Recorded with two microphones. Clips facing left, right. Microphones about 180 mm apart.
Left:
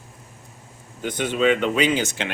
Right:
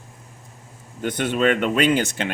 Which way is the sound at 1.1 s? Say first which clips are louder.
Even; 60° right (ahead or behind).